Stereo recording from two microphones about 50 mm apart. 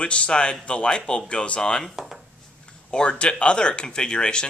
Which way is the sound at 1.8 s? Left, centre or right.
Centre.